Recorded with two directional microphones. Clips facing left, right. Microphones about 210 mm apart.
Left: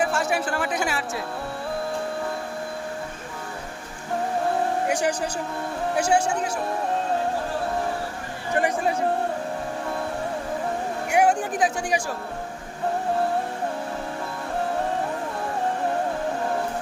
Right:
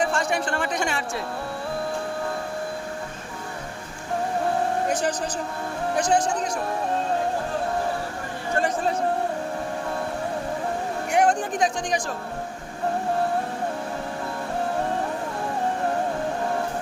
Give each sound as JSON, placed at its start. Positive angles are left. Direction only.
{"t": 0.0, "sound": "speech", "side_deg": 5}
{"t": 4.9, "sound": "speech", "side_deg": 10}
{"t": 8.5, "sound": "speech", "side_deg": 15}
{"t": 11.1, "sound": "speech", "side_deg": 10}